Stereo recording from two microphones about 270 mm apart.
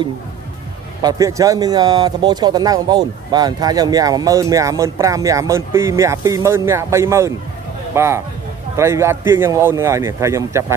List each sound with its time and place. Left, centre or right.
1.0 s speech: centre